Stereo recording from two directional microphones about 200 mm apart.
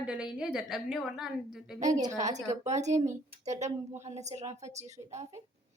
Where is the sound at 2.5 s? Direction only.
35° right (ahead or behind).